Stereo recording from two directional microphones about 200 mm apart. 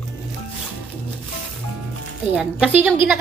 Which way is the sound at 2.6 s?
5° right (ahead or behind).